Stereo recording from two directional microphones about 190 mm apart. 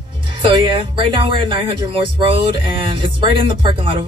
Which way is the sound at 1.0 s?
25° right (ahead or behind).